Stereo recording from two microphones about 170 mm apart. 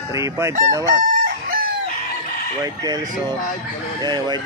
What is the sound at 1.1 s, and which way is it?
Chicken, 55° right (ahead or behind).